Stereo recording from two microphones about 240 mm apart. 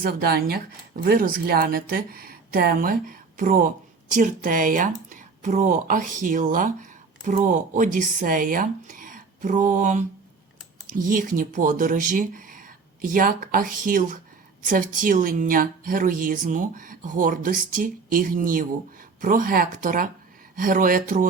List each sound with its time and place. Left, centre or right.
0.0 s a woman's voice: right